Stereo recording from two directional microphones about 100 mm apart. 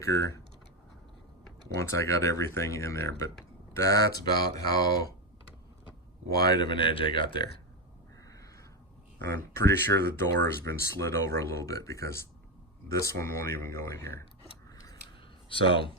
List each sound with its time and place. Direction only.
0.0 s speech: 30° left (ahead or behind)
1.7 s speech: 30° left (ahead or behind)
6.4 s speech: 45° left (ahead or behind)
9.3 s speech: 25° left (ahead or behind)
15.4 s speech: 60° left (ahead or behind)